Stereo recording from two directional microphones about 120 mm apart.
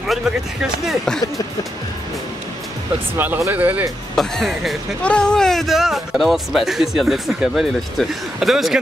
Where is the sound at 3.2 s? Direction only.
15° right (ahead or behind).